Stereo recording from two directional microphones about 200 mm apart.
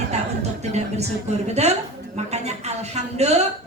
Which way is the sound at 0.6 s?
35° right (ahead or behind).